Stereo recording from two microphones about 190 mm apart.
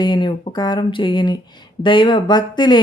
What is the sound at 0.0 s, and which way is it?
Speech, 25° left (ahead or behind).